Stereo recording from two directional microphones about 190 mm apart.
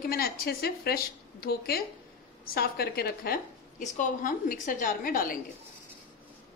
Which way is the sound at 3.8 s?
40° left (ahead or behind).